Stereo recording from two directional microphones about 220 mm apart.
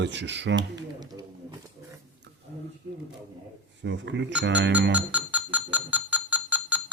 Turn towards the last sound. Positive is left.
turn(degrees=-5)  # may be behind; listen again after turning